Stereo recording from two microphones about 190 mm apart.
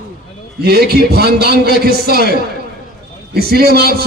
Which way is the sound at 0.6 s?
55° right (ahead or behind).